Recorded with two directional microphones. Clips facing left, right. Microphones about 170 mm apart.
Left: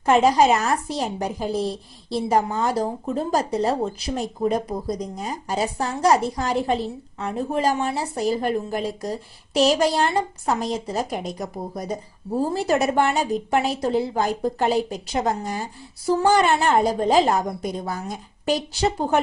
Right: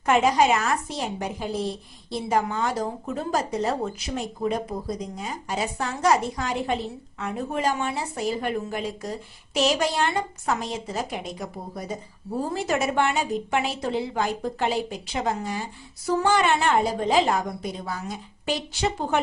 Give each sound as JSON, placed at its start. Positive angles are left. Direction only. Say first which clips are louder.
{"t": 0.0, "sound": "a woman's voice", "louder": "left 3 dB", "side_deg": 30}